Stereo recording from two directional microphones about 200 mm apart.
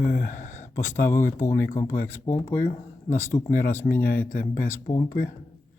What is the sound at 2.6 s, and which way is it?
Speech, 35° left (ahead or behind).